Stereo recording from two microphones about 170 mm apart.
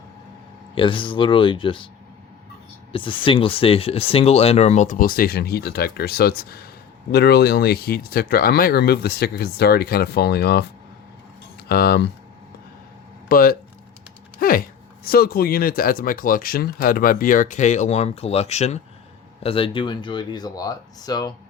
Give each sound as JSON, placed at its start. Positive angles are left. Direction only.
{"t": 0.8, "sound": "speech", "side_deg": 30}
{"t": 2.9, "sound": "speech", "side_deg": 30}
{"t": 11.7, "sound": "speech", "side_deg": 70}
{"t": 13.2, "sound": "speech", "side_deg": 60}